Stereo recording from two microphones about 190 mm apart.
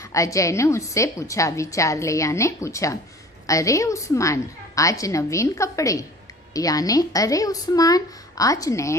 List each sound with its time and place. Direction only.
0.0 s a woman's voice: 15° left (ahead or behind)